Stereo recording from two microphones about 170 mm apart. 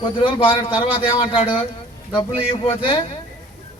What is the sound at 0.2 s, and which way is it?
A man's voice, 30° left (ahead or behind).